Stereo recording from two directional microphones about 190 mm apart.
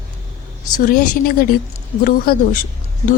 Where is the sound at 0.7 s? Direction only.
45° left (ahead or behind).